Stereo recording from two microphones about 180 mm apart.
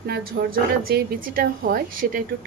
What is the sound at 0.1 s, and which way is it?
A woman's voice, 60° right (ahead or behind).